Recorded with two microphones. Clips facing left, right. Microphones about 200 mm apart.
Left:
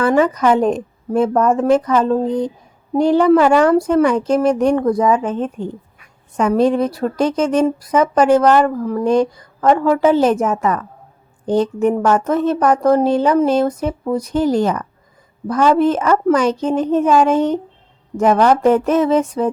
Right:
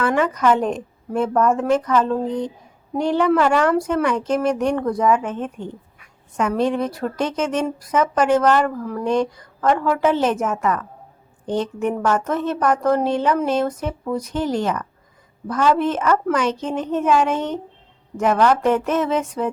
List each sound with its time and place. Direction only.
0.0 s speech: 35° left (ahead or behind)